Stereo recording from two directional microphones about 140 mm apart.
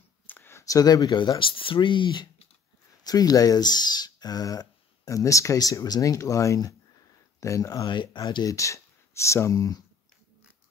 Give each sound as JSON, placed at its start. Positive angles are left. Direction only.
{"t": 0.3, "sound": "speech", "side_deg": 15}